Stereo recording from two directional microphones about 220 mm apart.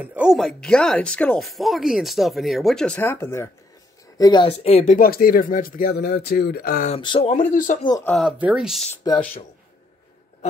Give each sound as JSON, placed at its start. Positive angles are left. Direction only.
{"t": 0.0, "sound": "speech", "side_deg": -5}
{"t": 4.9, "sound": "speech", "side_deg": 40}
{"t": 7.0, "sound": "speech", "side_deg": 25}
{"t": 8.0, "sound": "speech", "side_deg": 5}
{"t": 8.9, "sound": "speech", "side_deg": 15}